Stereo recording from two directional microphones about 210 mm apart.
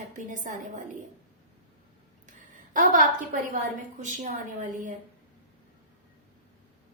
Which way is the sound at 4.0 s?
35° right (ahead or behind).